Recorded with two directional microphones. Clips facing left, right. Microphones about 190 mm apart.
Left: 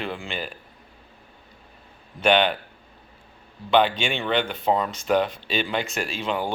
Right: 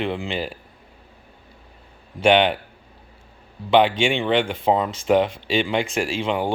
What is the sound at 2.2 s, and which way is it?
Speech, 25° right (ahead or behind).